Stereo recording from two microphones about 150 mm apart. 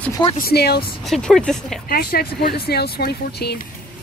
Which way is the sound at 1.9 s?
90° left.